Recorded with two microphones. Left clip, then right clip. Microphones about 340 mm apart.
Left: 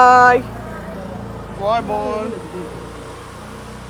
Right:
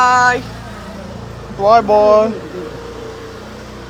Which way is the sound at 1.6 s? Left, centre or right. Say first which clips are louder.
Right 10 dB; centre.